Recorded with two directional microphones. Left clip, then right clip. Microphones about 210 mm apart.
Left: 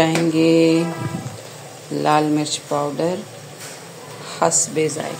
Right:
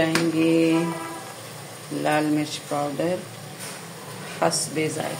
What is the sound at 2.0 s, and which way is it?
Speech, 25° left (ahead or behind).